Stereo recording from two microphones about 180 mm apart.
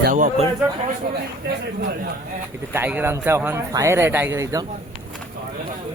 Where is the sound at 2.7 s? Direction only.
10° right (ahead or behind).